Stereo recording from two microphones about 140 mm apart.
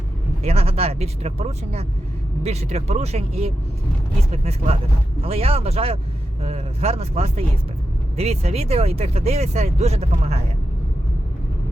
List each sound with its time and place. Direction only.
0.4 s speech: 45° right (ahead or behind)